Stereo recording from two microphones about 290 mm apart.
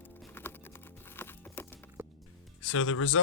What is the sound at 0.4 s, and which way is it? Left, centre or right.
Typing, centre.